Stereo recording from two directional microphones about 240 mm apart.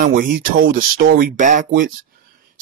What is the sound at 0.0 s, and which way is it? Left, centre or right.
Speech, right.